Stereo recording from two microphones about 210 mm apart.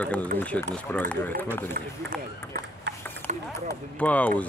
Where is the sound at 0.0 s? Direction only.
5° left (ahead or behind).